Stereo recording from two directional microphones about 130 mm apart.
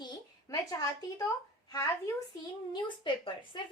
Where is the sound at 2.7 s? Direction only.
40° left (ahead or behind).